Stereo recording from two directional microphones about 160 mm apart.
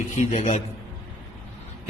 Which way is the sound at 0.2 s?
45° left (ahead or behind).